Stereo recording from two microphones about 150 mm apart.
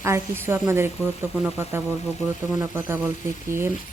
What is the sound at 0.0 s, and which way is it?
Speech, 15° right (ahead or behind).